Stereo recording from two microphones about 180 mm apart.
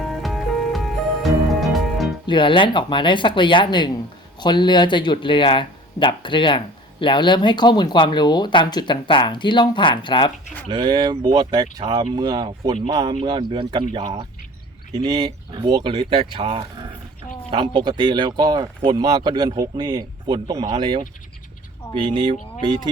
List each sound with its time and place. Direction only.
0.2 s music: centre (ahead or behind)
2.2 s speech: 25° left (ahead or behind)
10.7 s speech: 25° right (ahead or behind)